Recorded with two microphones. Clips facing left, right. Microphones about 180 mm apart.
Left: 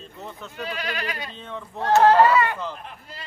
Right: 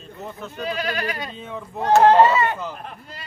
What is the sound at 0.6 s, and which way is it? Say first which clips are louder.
Speech: right 4 dB; 40° right (ahead or behind).